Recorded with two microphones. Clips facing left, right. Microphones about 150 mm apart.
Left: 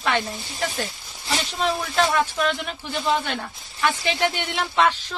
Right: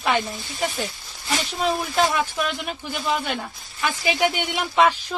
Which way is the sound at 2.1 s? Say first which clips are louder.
Left 2 dB; 10° right (ahead or behind).